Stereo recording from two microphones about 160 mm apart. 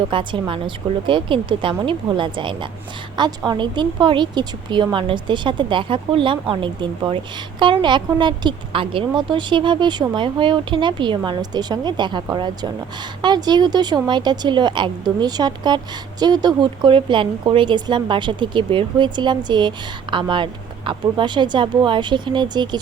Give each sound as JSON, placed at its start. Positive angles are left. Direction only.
{"t": 0.1, "sound": "speech", "side_deg": -30}